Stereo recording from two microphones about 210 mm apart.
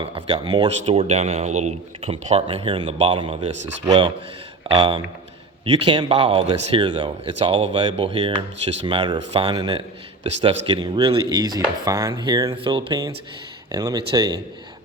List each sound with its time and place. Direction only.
0.0 s speech: 25° right (ahead or behind)
3.8 s dishes: 20° right (ahead or behind)